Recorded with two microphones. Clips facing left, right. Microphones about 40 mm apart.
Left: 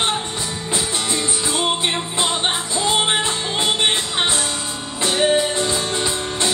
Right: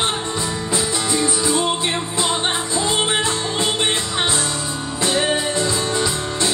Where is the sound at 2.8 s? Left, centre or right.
Left.